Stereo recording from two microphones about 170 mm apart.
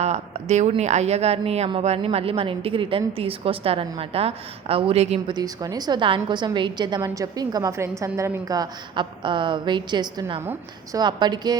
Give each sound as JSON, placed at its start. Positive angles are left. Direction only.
{"t": 0.0, "sound": "a woman's voice", "side_deg": -40}
{"t": 5.3, "sound": "a woman's voice", "side_deg": -20}